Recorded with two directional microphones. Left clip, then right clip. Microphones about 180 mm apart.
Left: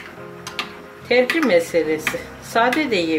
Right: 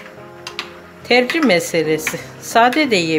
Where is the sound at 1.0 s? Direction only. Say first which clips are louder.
Right 3 dB; 50° right (ahead or behind).